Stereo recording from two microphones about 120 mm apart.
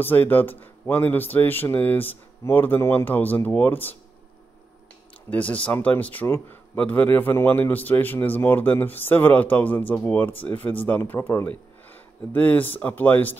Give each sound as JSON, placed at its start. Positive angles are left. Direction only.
{"t": 0.0, "sound": "a man's voice", "side_deg": 15}
{"t": 5.3, "sound": "a man's voice", "side_deg": 10}